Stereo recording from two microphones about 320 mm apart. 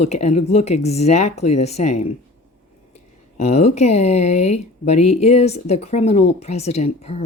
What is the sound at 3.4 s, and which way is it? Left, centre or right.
Speech, centre.